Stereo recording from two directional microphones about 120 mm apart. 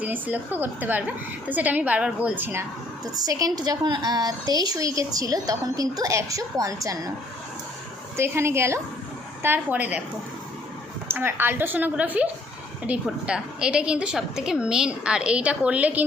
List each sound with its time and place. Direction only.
0.0 s a woman's voice: 15° right (ahead or behind)
3.2 s a woman's voice: 30° right (ahead or behind)
8.1 s a woman's voice: 20° right (ahead or behind)
11.1 s a woman's voice: 20° right (ahead or behind)